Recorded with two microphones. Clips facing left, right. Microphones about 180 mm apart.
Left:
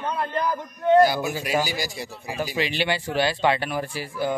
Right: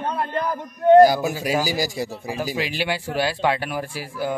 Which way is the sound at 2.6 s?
5° right (ahead or behind).